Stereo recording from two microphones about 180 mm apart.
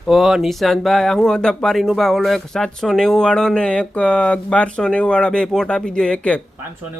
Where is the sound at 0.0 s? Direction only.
Centre (ahead or behind).